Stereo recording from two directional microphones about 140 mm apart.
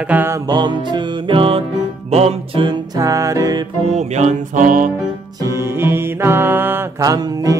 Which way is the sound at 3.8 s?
55° right (ahead or behind).